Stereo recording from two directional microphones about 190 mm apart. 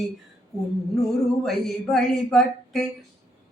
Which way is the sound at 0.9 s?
Centre (ahead or behind).